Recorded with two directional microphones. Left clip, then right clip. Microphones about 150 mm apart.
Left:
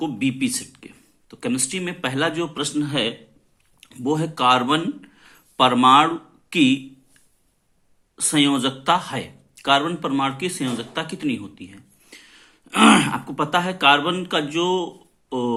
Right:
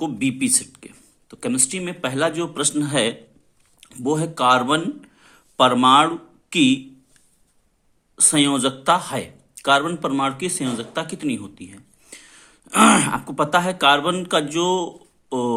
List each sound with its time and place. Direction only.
0.0 s speech: 30° right (ahead or behind)
2.6 s a man's voice: 45° right (ahead or behind)
3.8 s speech: 30° right (ahead or behind)
8.1 s speech: 35° right (ahead or behind)